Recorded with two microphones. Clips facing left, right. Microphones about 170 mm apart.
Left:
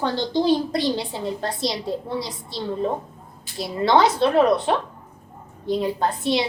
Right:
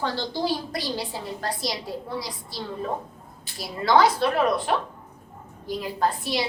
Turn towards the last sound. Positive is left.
turn(degrees=25)  # may be behind; listen again after turning